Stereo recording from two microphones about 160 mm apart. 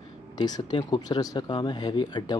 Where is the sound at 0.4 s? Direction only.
25° left (ahead or behind).